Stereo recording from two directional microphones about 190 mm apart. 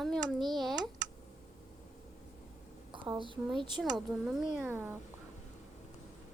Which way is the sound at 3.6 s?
25° right (ahead or behind).